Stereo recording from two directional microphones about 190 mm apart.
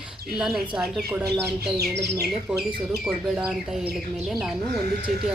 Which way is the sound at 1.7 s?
55° right (ahead or behind).